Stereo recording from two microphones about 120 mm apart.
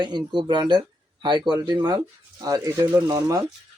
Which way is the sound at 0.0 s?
40° right (ahead or behind).